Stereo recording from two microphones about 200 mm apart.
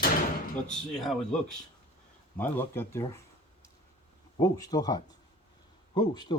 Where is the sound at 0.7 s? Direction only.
Centre (ahead or behind).